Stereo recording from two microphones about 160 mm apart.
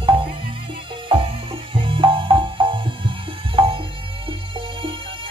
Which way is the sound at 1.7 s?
35° right (ahead or behind).